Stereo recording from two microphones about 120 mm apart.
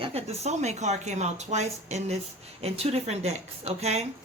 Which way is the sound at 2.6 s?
60° right (ahead or behind).